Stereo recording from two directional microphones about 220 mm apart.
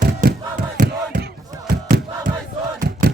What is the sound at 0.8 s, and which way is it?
Battle cry, 35° right (ahead or behind).